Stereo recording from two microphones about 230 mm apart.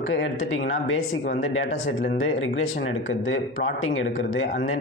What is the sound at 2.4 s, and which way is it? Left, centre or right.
Speech, left.